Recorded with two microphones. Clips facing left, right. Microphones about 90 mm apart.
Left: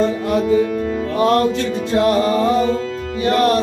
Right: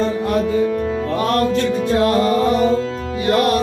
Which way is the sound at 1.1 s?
25° left (ahead or behind).